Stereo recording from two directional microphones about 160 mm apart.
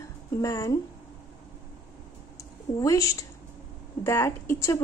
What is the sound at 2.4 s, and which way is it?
A woman's voice, 20° left (ahead or behind).